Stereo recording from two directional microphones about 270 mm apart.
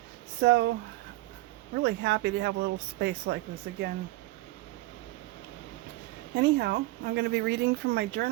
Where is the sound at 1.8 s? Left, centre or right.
Right.